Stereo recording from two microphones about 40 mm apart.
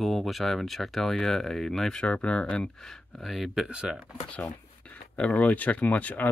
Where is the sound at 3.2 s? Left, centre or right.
Centre.